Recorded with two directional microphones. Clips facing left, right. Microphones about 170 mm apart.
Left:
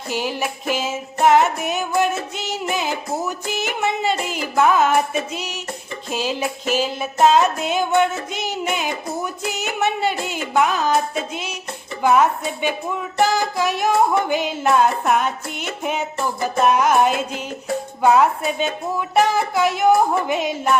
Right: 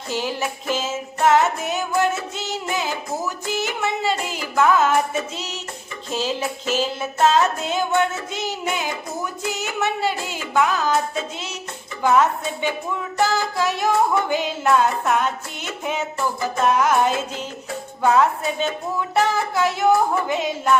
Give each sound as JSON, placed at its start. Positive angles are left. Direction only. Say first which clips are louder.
{"t": 0.1, "sound": "music", "louder": "left 1 dB", "side_deg": 15}